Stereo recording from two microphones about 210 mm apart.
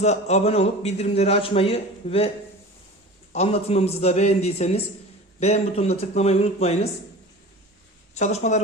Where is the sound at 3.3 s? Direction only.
30° left (ahead or behind).